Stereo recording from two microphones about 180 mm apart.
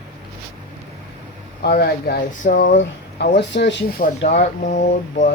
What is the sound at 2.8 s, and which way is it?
Speech, 80° left.